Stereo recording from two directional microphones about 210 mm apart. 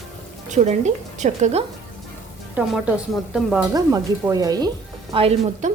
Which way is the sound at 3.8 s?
15° right (ahead or behind).